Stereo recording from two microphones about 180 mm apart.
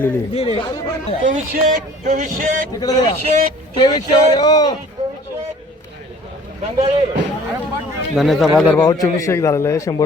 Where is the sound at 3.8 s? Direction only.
25° left (ahead or behind).